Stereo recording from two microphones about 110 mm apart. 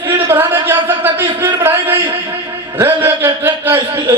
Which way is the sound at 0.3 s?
20° right (ahead or behind).